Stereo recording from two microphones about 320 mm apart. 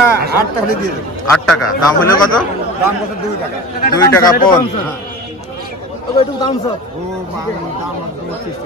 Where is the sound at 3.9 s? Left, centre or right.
Centre.